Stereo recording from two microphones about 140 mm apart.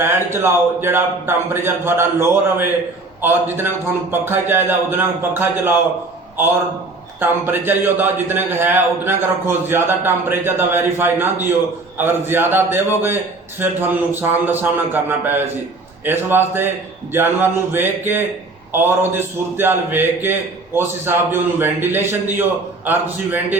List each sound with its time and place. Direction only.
0.0 s a man's voice: 15° right (ahead or behind)
7.2 s a man's voice: 15° right (ahead or behind)
16.6 s a man's voice: 15° right (ahead or behind)